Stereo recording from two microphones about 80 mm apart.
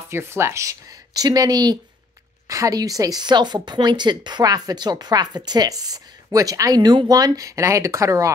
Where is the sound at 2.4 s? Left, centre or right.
Right.